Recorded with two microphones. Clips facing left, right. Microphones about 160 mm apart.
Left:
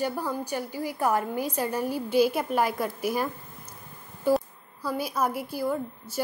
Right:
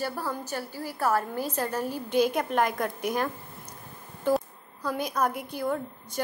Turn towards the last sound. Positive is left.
turn(degrees=5)  # may be behind; listen again after turning